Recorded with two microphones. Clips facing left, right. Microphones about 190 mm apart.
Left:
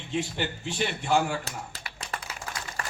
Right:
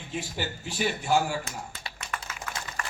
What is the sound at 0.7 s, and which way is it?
Speech, 5° right (ahead or behind).